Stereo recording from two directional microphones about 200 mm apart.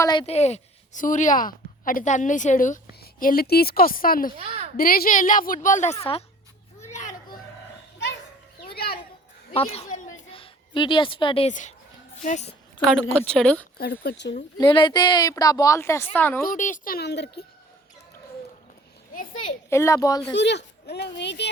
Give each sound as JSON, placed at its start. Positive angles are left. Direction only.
{"t": 0.0, "sound": "a woman's voice", "side_deg": 20}
{"t": 4.4, "sound": "a woman's voice", "side_deg": -30}
{"t": 4.8, "sound": "speech", "side_deg": 45}
{"t": 6.8, "sound": "children playing", "side_deg": 35}
{"t": 8.7, "sound": "children playing", "side_deg": 50}
{"t": 9.6, "sound": "a woman's voice", "side_deg": 30}
{"t": 13.1, "sound": "speech", "side_deg": 5}
{"t": 13.7, "sound": "a woman's voice", "side_deg": 50}
{"t": 14.6, "sound": "a woman's voice", "side_deg": 25}
{"t": 16.5, "sound": "a woman's voice", "side_deg": 40}
{"t": 19.7, "sound": "speech", "side_deg": 15}
{"t": 20.3, "sound": "speech", "side_deg": 60}